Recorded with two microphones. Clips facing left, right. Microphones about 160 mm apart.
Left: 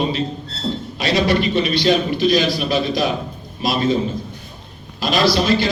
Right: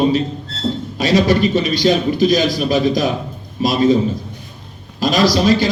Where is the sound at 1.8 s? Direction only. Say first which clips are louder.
Right 3 dB; 45° right (ahead or behind).